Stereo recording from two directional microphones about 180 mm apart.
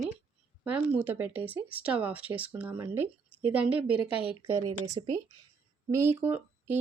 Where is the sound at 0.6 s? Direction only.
10° right (ahead or behind).